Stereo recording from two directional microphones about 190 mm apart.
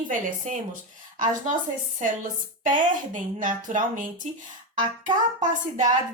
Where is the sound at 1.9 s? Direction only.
45° right (ahead or behind).